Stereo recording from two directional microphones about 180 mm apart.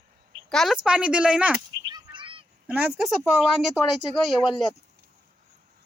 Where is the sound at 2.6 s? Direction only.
5° right (ahead or behind).